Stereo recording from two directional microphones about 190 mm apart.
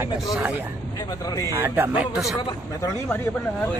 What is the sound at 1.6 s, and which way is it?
Speech, 10° right (ahead or behind).